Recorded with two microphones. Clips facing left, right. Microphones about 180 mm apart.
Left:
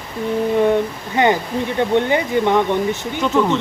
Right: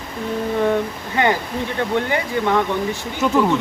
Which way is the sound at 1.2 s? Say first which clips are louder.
Left 3 dB; 20° left (ahead or behind).